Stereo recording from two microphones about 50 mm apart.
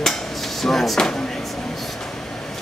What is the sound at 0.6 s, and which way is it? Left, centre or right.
Speech, centre.